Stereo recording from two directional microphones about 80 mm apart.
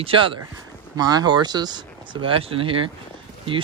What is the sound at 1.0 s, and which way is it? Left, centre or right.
Speech, right.